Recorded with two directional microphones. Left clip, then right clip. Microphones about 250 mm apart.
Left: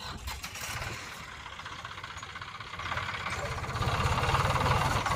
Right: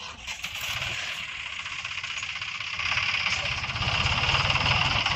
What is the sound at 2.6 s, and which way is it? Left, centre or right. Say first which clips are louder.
Vehicle: right 8 dB; left.